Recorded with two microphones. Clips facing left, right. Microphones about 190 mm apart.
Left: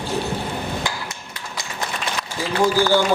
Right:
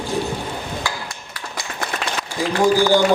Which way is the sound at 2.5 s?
15° right (ahead or behind).